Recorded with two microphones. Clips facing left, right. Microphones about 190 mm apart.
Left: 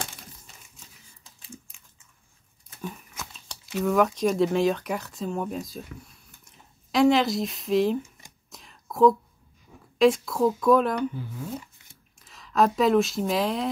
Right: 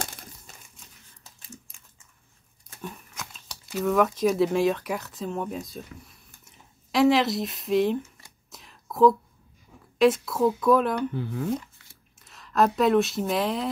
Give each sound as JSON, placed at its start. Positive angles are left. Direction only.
{"t": 2.8, "sound": "speech", "side_deg": 0}
{"t": 8.5, "sound": "whispering", "side_deg": 0}
{"t": 9.9, "sound": "a woman's voice", "side_deg": 0}
{"t": 11.1, "sound": "speech", "side_deg": -70}
{"t": 12.2, "sound": "speech", "side_deg": 0}